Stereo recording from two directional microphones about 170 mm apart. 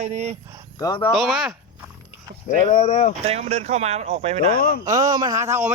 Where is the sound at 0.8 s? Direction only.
25° left (ahead or behind).